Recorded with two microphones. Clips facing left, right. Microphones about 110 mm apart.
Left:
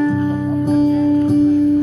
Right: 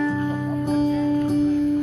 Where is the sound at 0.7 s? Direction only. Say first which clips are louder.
Left 6 dB; 45° left (ahead or behind).